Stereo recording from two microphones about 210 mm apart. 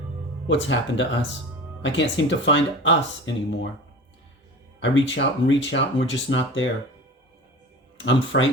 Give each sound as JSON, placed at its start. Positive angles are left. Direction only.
{"t": 0.4, "sound": "speech", "side_deg": 60}
{"t": 4.8, "sound": "speech", "side_deg": 60}
{"t": 7.9, "sound": "speech", "side_deg": 60}